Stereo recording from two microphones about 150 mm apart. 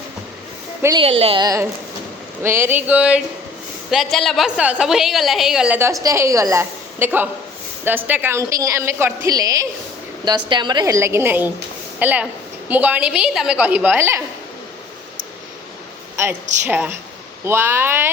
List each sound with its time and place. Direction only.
0.9 s a woman's voice: 40° right (ahead or behind)
2.4 s a woman's voice: 15° right (ahead or behind)
5.9 s a woman's voice: 20° right (ahead or behind)
16.1 s a woman's voice: 15° right (ahead or behind)